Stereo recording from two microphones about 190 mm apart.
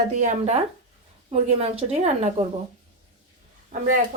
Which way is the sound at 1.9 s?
35° right (ahead or behind).